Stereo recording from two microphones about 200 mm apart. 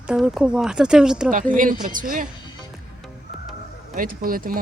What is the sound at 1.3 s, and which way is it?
Speech, 40° right (ahead or behind).